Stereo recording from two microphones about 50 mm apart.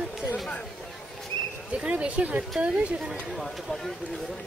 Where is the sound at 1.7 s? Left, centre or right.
Right.